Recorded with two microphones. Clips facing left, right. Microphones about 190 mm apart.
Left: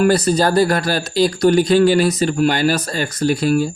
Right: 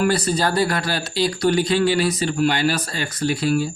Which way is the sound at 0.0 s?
45° left (ahead or behind).